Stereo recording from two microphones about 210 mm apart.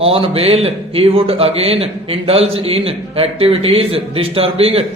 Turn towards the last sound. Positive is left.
turn(degrees=-30)  # may be behind; listen again after turning